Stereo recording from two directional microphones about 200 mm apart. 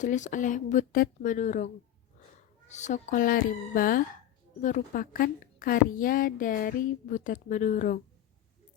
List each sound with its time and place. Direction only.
0.0 s a woman's voice: 40° left (ahead or behind)